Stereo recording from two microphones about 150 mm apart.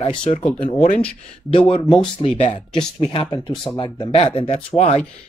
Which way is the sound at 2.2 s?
35° left (ahead or behind).